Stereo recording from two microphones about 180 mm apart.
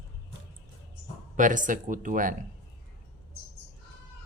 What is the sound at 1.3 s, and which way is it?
Speech, 45° right (ahead or behind).